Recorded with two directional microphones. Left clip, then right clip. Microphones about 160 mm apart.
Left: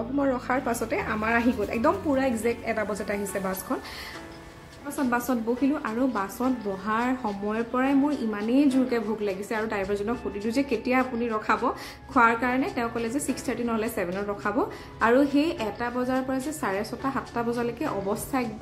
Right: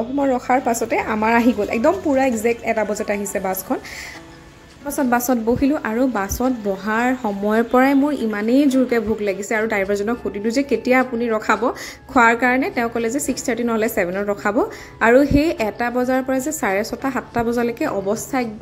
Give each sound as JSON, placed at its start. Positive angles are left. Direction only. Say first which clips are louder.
{"t": 0.2, "sound": "a woman's voice", "louder": "right 8 dB", "side_deg": -25}
{"t": 4.9, "sound": "a woman's voice", "louder": "right 8 dB", "side_deg": -30}
{"t": 7.4, "sound": "a woman's voice", "louder": "right 12 dB", "side_deg": -45}